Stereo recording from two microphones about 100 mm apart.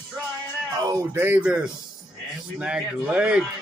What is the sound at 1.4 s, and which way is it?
A man's voice, 10° right (ahead or behind).